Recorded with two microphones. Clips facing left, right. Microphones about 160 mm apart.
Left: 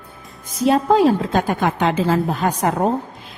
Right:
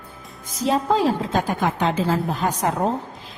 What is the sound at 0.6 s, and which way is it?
A woman's voice, 60° left (ahead or behind).